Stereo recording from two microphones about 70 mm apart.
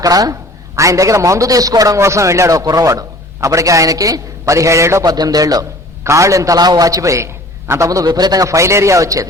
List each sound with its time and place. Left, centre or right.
0.0 s a man's voice: right
0.8 s a man's voice: right
2.0 s a man's voice: right
5.0 s speech: right
6.1 s a man's voice: right
8.0 s speech: right
8.4 s a man's voice: right